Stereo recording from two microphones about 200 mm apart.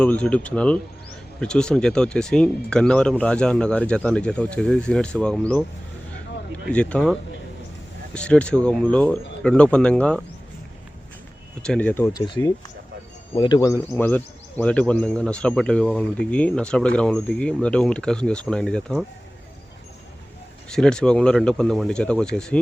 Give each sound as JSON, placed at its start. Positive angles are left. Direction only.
{"t": 0.0, "sound": "a man's voice", "side_deg": 5}
{"t": 6.7, "sound": "a man's voice", "side_deg": 5}
{"t": 11.6, "sound": "speech", "side_deg": 5}
{"t": 13.3, "sound": "a man's voice", "side_deg": 20}
{"t": 20.7, "sound": "a man's voice", "side_deg": 5}